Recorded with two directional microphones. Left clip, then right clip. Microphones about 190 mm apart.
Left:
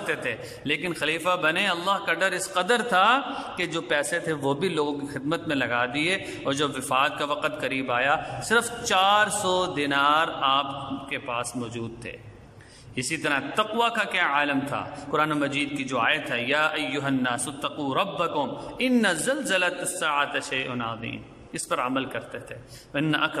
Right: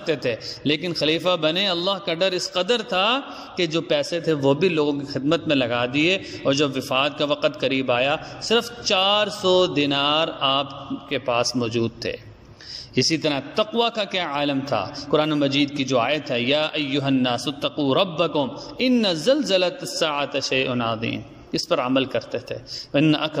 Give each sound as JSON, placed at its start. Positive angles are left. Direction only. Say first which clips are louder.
{"t": 0.0, "sound": "a man's voice", "louder": "right 5 dB", "side_deg": -20}